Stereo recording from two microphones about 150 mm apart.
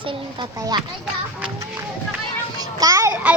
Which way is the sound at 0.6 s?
25° right (ahead or behind).